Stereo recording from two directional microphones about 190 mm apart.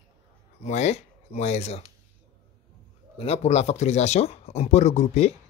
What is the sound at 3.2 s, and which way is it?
Speech, 35° left (ahead or behind).